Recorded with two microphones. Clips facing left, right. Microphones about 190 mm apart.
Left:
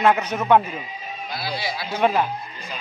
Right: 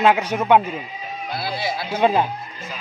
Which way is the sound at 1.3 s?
55° right (ahead or behind).